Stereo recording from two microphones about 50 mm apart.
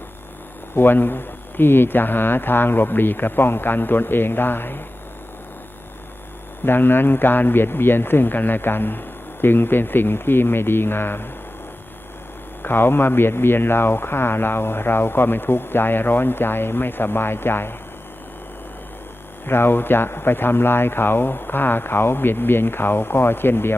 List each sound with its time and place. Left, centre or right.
0.8 s speech: left
6.7 s speech: left
12.6 s speech: left
19.5 s speech: left